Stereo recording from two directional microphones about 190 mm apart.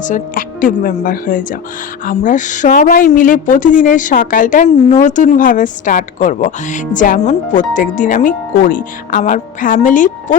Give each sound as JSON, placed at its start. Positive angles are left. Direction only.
{"t": 0.0, "sound": "a woman's voice", "side_deg": 45}